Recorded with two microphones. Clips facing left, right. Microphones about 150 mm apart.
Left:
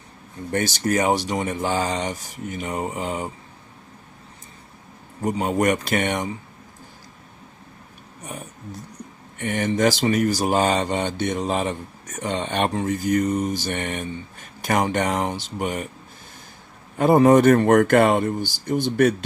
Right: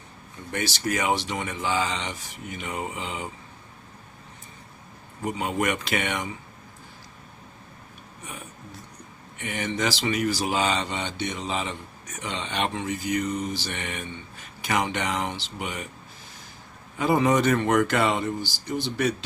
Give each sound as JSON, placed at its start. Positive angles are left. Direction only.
{"t": 0.5, "sound": "speech", "side_deg": 45}
{"t": 5.2, "sound": "speech", "side_deg": 40}
{"t": 8.2, "sound": "speech", "side_deg": 40}
{"t": 17.0, "sound": "speech", "side_deg": 50}